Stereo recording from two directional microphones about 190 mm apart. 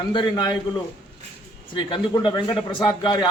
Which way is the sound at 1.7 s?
25° left (ahead or behind).